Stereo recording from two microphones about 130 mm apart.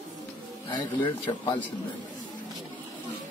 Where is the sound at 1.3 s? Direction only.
35° left (ahead or behind).